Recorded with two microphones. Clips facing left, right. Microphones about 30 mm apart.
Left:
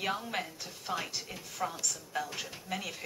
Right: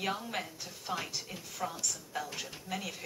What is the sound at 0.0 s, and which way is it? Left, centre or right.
A woman's voice, centre.